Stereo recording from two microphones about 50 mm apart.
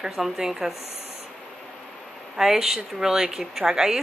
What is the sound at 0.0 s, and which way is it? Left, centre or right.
Speech, centre.